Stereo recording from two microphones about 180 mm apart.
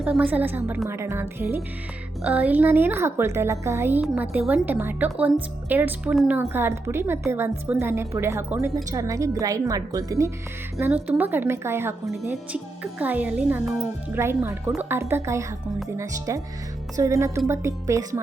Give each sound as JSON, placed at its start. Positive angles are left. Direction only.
{"t": 0.0, "sound": "a woman's voice", "side_deg": -5}